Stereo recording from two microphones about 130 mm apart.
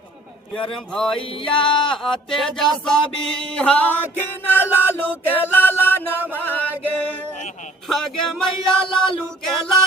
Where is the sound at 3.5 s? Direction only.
10° left (ahead or behind).